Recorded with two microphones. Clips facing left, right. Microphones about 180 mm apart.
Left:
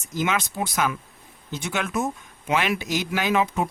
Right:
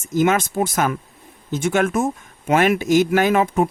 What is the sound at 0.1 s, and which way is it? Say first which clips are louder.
Speech: right 8 dB; 50° right (ahead or behind).